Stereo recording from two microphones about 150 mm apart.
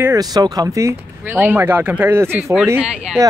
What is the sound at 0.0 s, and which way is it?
Speech, 25° right (ahead or behind).